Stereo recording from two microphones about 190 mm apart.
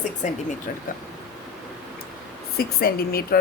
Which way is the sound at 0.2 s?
40° left (ahead or behind).